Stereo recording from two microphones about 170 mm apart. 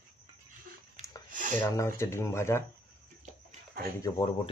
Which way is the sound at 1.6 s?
15° left (ahead or behind).